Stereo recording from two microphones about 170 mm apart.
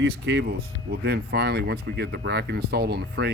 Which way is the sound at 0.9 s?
70° right (ahead or behind).